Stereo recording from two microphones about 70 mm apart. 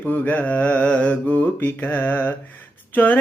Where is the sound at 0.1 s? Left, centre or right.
Left.